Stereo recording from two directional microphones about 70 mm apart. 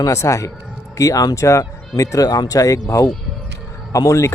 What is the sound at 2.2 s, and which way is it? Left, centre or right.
Speech, left.